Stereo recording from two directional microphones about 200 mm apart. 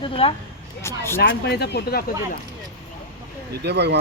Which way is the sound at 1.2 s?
55° left (ahead or behind).